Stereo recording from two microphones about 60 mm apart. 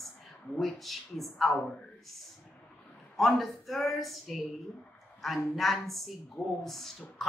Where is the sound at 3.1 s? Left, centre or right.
Centre.